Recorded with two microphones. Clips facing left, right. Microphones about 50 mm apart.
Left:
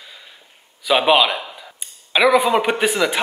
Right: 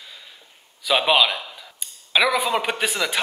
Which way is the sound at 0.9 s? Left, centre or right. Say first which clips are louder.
Left 4 dB; centre.